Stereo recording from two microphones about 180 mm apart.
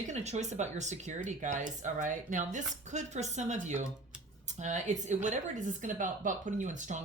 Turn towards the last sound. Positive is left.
turn(degrees=-45)  # may be behind; listen again after turning